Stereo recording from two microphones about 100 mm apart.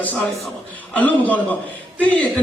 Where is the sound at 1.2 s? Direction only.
15° left (ahead or behind).